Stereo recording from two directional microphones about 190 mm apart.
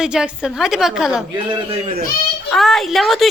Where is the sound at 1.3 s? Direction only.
25° right (ahead or behind).